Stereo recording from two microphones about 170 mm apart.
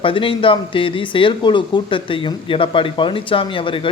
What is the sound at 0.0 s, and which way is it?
Speech, 30° left (ahead or behind).